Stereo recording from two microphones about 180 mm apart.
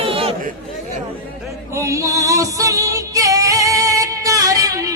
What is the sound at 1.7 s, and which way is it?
Music, 15° right (ahead or behind).